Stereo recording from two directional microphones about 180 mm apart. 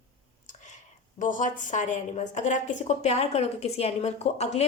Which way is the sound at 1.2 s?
45° left (ahead or behind).